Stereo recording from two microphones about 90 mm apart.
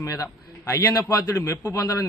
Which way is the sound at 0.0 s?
40° left (ahead or behind).